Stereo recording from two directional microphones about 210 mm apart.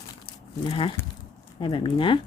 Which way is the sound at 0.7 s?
25° left (ahead or behind).